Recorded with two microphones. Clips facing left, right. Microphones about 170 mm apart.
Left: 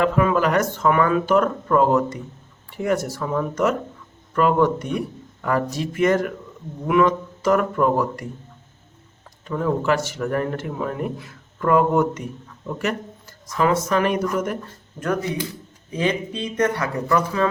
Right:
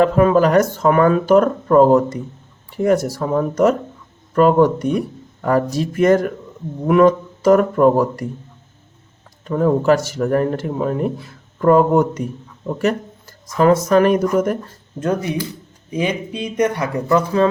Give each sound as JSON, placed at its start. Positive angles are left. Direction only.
{"t": 0.0, "sound": "speech", "side_deg": -40}
{"t": 9.4, "sound": "speech", "side_deg": -40}
{"t": 14.9, "sound": "speech", "side_deg": -20}